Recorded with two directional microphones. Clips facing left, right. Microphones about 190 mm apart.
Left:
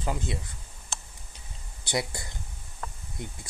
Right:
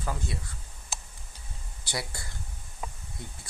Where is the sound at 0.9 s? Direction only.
5° right (ahead or behind).